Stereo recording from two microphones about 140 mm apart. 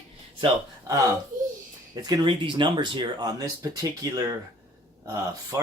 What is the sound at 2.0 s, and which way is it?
Speech, 35° right (ahead or behind).